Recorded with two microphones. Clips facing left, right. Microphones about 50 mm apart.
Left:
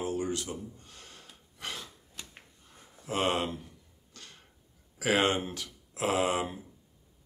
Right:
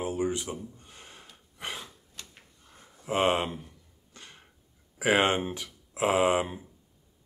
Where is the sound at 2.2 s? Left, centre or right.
Centre.